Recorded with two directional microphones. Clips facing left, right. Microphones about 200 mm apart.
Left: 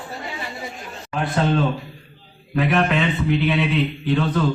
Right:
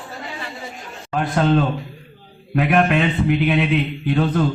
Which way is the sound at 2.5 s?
55° right (ahead or behind).